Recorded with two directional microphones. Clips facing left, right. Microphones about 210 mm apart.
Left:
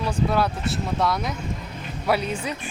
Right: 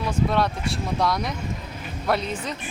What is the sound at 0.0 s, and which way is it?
Speech, 10° left (ahead or behind).